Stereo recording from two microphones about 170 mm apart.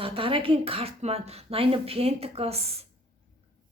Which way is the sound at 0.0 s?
35° right (ahead or behind).